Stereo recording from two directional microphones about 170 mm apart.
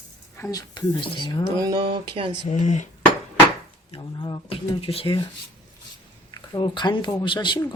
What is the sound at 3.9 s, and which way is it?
Speech, 30° left (ahead or behind).